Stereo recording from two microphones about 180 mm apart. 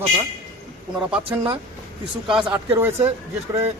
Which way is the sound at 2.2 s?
5° right (ahead or behind).